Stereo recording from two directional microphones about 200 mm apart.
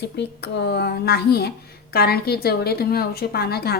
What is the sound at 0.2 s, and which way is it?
Speech, 60° left (ahead or behind).